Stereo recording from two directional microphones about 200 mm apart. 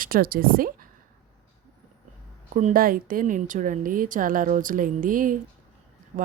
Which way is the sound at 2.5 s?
40° right (ahead or behind).